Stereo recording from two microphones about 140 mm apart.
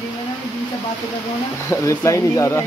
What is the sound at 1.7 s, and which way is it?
Speech, 20° left (ahead or behind).